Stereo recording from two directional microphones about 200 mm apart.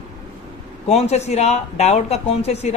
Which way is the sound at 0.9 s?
30° left (ahead or behind).